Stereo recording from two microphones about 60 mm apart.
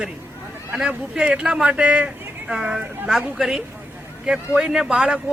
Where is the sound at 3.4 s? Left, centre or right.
Centre.